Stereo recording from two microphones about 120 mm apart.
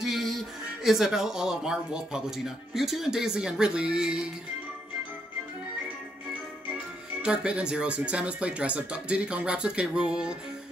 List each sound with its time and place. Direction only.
0.0 s music: centre (ahead or behind)
0.8 s speech: 5° right (ahead or behind)
7.2 s speech: 10° right (ahead or behind)